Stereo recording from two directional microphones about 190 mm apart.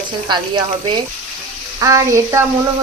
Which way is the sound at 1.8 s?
15° right (ahead or behind).